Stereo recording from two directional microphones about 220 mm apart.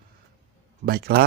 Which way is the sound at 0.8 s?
45° right (ahead or behind).